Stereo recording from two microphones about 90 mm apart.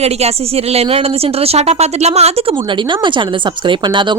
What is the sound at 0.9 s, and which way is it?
Speech, 90° right.